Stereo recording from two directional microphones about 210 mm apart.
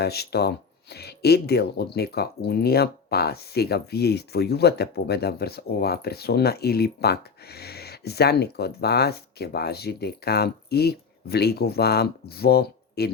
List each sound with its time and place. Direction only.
0.0 s speech: 50° left (ahead or behind)